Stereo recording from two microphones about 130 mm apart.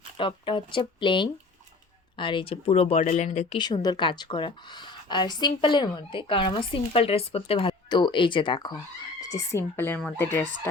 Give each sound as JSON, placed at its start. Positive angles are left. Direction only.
{"t": 0.2, "sound": "speech", "side_deg": 40}
{"t": 3.6, "sound": "speech", "side_deg": 35}
{"t": 7.7, "sound": "speech", "side_deg": 35}
{"t": 9.2, "sound": "speech", "side_deg": 25}